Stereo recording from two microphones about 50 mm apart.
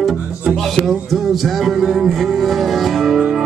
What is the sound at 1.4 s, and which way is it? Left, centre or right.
Music, centre.